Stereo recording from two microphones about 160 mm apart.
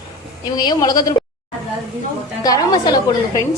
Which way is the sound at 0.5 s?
25° left (ahead or behind).